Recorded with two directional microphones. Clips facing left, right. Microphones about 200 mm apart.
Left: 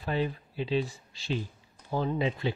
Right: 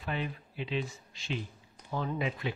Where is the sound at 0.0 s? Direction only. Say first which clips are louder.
Left 6 dB; 35° left (ahead or behind).